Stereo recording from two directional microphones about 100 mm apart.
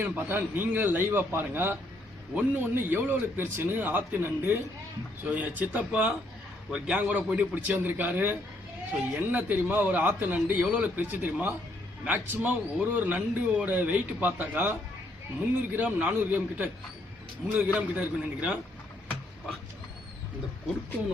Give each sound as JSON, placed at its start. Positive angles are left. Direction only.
{"t": 0.0, "sound": "speech", "side_deg": -20}